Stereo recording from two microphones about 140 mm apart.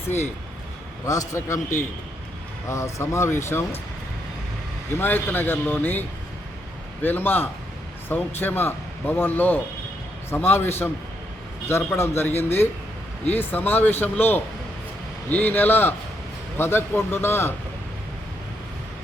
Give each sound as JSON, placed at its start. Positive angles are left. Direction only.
{"t": 1.0, "sound": "speech", "side_deg": 25}
{"t": 4.9, "sound": "speech", "side_deg": 15}